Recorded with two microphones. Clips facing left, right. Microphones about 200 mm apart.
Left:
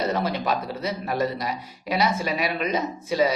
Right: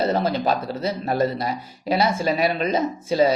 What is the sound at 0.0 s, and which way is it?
Speech, 30° right (ahead or behind).